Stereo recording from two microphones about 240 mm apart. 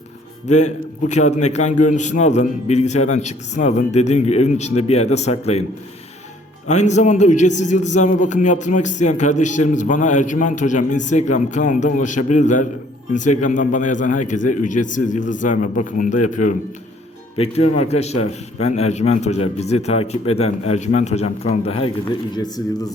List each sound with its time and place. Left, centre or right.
0.4 s a man's voice: left
6.7 s a man's voice: left